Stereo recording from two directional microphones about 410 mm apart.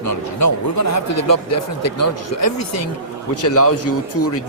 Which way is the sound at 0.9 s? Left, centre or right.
Left.